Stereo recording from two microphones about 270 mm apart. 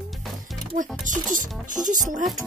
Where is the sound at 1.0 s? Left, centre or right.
Right.